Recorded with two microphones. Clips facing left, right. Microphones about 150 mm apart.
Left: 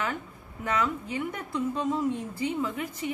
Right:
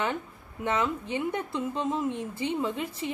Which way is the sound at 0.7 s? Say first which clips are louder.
Right 1 dB; 25° right (ahead or behind).